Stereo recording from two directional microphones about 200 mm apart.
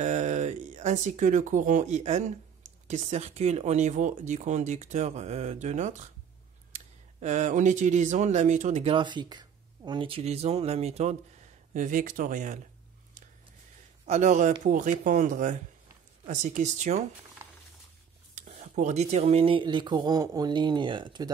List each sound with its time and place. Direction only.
0.0 s speech: 35° right (ahead or behind)
14.0 s speech: 35° right (ahead or behind)
18.3 s speech: 35° right (ahead or behind); by 21.3 s 20° right (ahead or behind)